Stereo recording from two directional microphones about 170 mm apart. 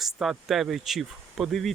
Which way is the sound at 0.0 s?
Centre (ahead or behind).